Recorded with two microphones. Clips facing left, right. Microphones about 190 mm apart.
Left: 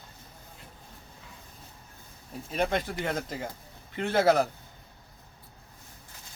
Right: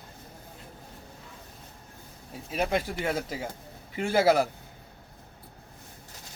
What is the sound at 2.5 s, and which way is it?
Speech, 5° right (ahead or behind).